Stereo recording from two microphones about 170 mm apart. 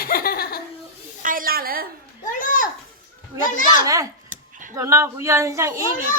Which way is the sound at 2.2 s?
55° left (ahead or behind).